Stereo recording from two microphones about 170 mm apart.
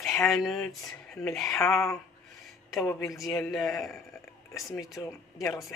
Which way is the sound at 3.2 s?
Centre (ahead or behind).